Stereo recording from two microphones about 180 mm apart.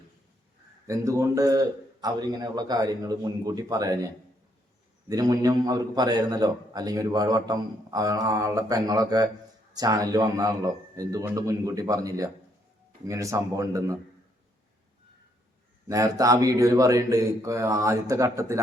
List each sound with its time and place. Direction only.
0.9 s a man's voice: 15° right (ahead or behind)
15.9 s speech: 20° right (ahead or behind)